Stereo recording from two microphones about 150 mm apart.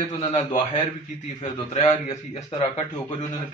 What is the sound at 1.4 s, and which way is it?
Speech, 50° left (ahead or behind).